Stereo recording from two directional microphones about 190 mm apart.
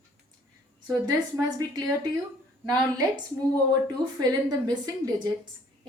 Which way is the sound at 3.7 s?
20° right (ahead or behind).